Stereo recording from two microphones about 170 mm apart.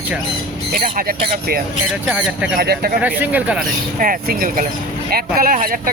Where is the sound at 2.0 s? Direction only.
5° right (ahead or behind).